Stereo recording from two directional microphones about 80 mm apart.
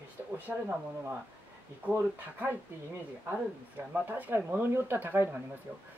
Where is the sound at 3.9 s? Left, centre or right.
Right.